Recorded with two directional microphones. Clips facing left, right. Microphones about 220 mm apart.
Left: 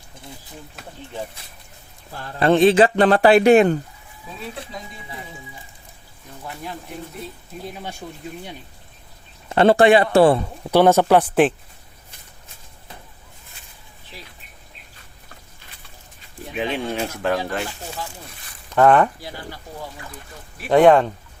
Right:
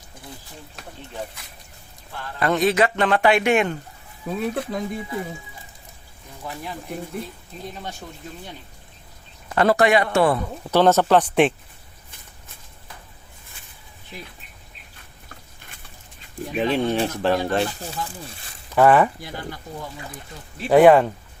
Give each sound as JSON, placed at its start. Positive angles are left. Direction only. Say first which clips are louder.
{"t": 2.1, "sound": "speech", "louder": "left 6 dB", "side_deg": 30}
{"t": 4.3, "sound": "speech", "louder": "right 9 dB", "side_deg": -55}
{"t": 7.7, "sound": "speech", "louder": "even", "side_deg": 10}
{"t": 9.5, "sound": "a man's voice", "louder": "left 4 dB", "side_deg": 25}
{"t": 10.7, "sound": "speech", "louder": "left 2 dB", "side_deg": 10}
{"t": 16.6, "sound": "speech", "louder": "right 3 dB", "side_deg": -35}
{"t": 18.7, "sound": "speech", "louder": "left 1 dB", "side_deg": -5}
{"t": 20.7, "sound": "speech", "louder": "even", "side_deg": -5}